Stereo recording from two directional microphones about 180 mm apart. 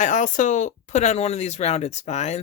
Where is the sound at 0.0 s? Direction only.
45° left (ahead or behind).